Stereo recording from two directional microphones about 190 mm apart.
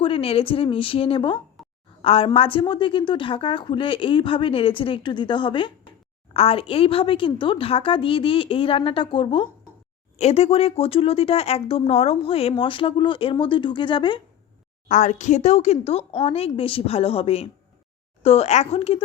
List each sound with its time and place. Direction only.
0.0 s speech: 30° left (ahead or behind)
1.6 s a sound: centre (ahead or behind)
2.0 s speech: 30° left (ahead or behind)
14.8 s a woman's voice: 40° left (ahead or behind)